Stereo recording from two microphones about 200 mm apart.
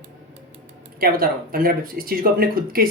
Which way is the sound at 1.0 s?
45° right (ahead or behind).